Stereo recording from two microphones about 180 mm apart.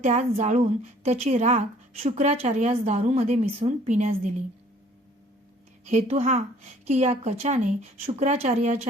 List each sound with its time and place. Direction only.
0.0 s a woman's voice: 40° right (ahead or behind)
5.8 s a woman's voice: 40° right (ahead or behind)